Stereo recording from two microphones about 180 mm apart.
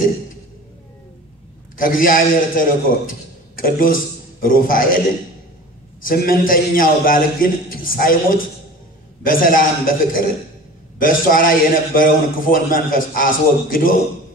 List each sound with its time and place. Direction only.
1.8 s a man's voice: 50° left (ahead or behind)
6.0 s a man's voice: 50° left (ahead or behind)